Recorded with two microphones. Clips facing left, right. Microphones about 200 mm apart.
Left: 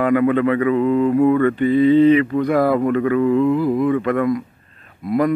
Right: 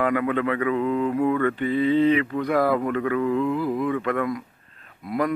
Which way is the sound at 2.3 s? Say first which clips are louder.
Left 5 dB; 30° left (ahead or behind).